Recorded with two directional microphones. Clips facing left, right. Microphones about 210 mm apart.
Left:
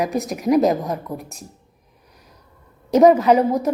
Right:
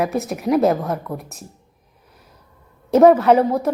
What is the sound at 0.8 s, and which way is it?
Speech, 15° left (ahead or behind).